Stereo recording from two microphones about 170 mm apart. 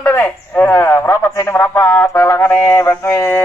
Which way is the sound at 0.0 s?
10° left (ahead or behind).